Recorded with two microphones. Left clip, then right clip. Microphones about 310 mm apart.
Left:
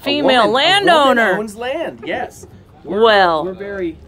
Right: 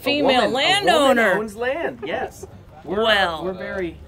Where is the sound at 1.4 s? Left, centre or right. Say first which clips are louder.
Left 2 dB; left.